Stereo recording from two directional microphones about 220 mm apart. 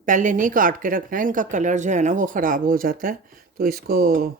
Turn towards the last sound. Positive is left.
turn(degrees=-40)  # may be behind; listen again after turning